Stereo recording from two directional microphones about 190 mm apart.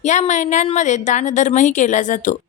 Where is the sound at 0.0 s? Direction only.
40° left (ahead or behind).